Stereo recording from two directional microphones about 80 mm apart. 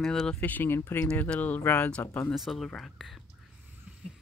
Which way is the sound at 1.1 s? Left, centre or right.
Centre.